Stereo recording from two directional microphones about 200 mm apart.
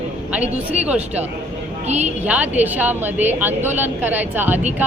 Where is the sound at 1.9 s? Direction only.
35° right (ahead or behind).